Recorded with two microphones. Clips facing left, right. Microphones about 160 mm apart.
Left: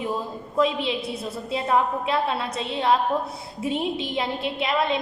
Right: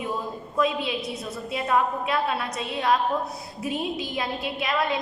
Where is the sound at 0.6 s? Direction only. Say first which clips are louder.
Left 2 dB; 25° left (ahead or behind).